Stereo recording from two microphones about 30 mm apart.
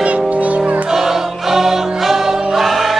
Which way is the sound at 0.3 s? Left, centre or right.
Right.